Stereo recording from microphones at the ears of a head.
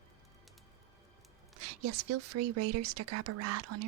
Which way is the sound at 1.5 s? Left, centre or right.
Right.